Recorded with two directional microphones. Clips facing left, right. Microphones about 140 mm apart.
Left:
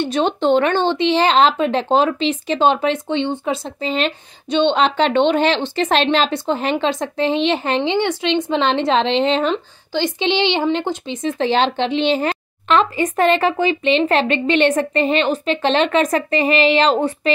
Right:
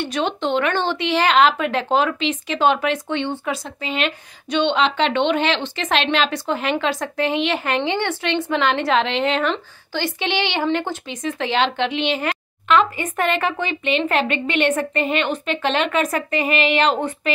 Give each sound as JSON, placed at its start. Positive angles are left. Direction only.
{"t": 0.0, "sound": "speech", "side_deg": 30}
{"t": 16.4, "sound": "speech", "side_deg": 25}